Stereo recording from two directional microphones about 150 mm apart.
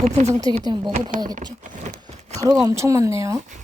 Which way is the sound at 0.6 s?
30° right (ahead or behind).